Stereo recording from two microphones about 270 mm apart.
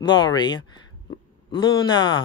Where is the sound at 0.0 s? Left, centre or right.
Centre.